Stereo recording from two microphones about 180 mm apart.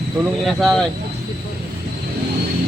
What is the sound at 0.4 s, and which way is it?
Speech, centre (ahead or behind).